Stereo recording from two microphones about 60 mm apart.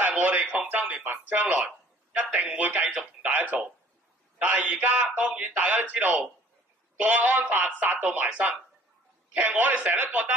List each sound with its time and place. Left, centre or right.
0.0 s a sound: right
1.0 s a man's voice: right
9.3 s speech: right